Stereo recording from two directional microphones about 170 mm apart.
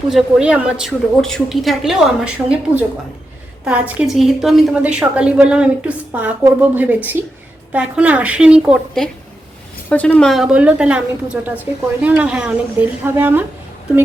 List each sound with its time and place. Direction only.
0.1 s a woman's voice: 5° right (ahead or behind)
9.9 s a woman's voice: 10° left (ahead or behind); by 13.4 s 10° right (ahead or behind)